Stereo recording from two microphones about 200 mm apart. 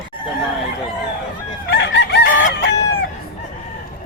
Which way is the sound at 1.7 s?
60° left (ahead or behind).